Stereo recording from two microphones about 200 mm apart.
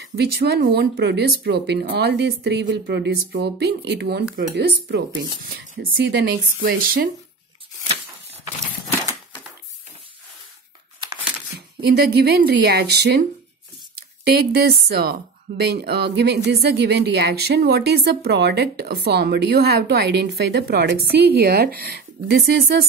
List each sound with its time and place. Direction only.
0.0 s a woman's voice: 50° right (ahead or behind)
8.9 s horse: 15° left (ahead or behind)
11.8 s a woman's voice: 55° right (ahead or behind)
14.3 s a woman's voice: 50° right (ahead or behind)